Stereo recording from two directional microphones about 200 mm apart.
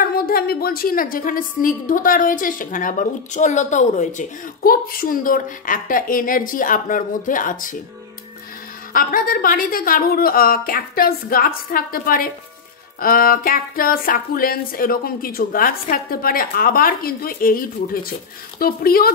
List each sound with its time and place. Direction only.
0.0 s a woman's voice: 50° left (ahead or behind)
8.9 s a woman's voice: 45° left (ahead or behind)